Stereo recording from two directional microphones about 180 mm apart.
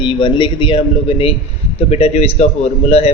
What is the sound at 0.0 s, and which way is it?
A man's voice, 30° left (ahead or behind).